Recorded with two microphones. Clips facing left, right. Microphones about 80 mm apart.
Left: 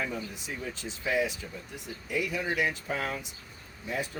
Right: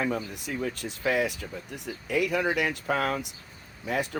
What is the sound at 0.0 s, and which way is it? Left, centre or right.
Speech, right.